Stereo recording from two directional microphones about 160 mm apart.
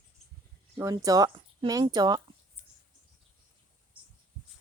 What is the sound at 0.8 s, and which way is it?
A woman's voice, 20° right (ahead or behind).